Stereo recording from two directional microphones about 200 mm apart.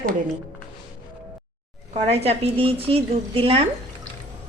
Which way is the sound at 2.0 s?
30° right (ahead or behind).